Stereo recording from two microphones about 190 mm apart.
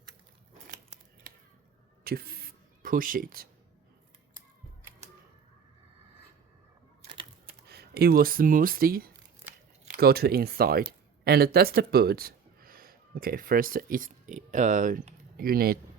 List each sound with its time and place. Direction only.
2.0 s a sound: 55° right (ahead or behind)
7.0 s typewriter: 25° right (ahead or behind)
7.7 s speech: 55° right (ahead or behind)